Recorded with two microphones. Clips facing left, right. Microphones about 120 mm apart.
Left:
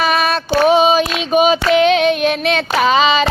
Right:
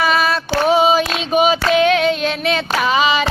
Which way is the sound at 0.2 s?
60° left (ahead or behind).